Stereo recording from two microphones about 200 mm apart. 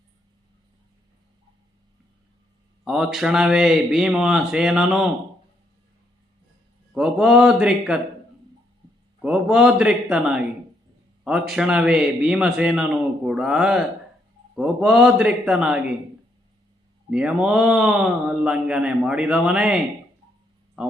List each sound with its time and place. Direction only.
2.8 s a man's voice: centre (ahead or behind)
6.9 s a man's voice: centre (ahead or behind)
9.2 s a man's voice: centre (ahead or behind)
17.1 s a man's voice: 5° right (ahead or behind)